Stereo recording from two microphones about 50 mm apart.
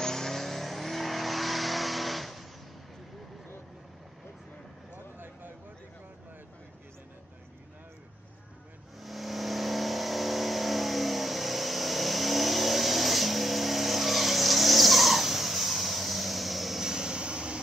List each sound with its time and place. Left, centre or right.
0.0 s vehicle: centre
4.9 s a sound: right
9.0 s vehicle: centre